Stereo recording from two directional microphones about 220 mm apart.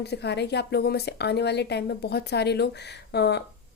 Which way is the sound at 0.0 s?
50° left (ahead or behind).